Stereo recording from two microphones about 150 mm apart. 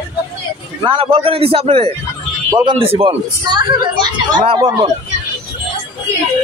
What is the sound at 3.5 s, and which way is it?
Speech, 30° right (ahead or behind).